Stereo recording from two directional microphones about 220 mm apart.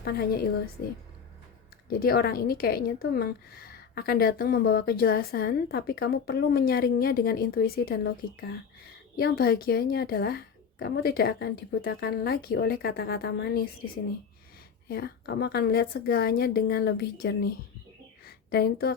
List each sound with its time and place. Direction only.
0.0 s a woman's voice: 45° left (ahead or behind)
1.9 s a woman's voice: 40° left (ahead or behind)